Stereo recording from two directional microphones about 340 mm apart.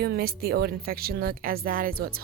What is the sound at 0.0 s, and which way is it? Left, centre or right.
Speech, right.